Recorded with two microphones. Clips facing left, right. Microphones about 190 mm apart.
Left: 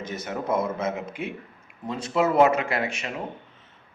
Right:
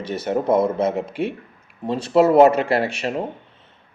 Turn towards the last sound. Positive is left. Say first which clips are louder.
# right 7 dB
turn(degrees=-35)  # may be behind; listen again after turning